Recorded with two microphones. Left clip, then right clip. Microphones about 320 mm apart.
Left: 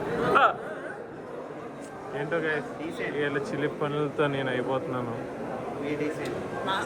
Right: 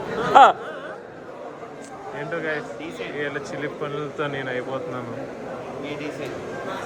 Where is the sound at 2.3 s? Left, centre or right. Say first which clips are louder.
Right 1 dB; centre.